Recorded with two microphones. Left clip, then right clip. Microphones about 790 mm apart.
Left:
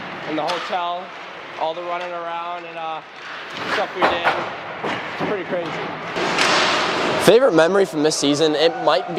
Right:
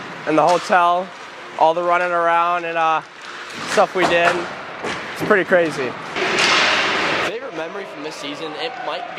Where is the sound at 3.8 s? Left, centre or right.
Right.